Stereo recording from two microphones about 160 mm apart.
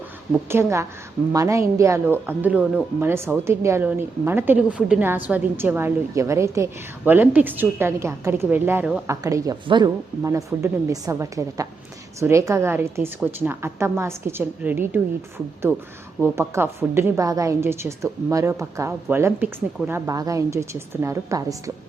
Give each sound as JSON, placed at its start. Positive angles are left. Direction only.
{"t": 0.4, "sound": "speech", "side_deg": -15}
{"t": 16.2, "sound": "speech", "side_deg": -15}